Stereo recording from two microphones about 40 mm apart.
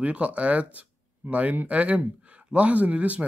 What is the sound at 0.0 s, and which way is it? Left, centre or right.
Speech, right.